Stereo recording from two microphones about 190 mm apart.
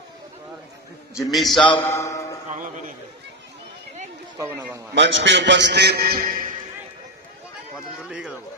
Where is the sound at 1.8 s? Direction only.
15° left (ahead or behind).